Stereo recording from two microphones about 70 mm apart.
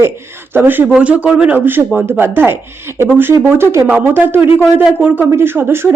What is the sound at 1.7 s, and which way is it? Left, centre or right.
Speech, right.